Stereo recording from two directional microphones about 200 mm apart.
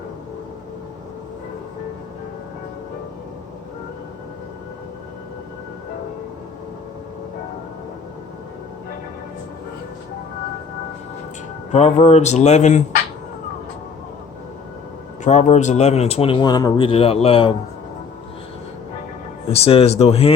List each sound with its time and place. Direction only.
11.7 s speech: 35° left (ahead or behind)
15.2 s speech: 35° left (ahead or behind)
19.5 s speech: 30° left (ahead or behind)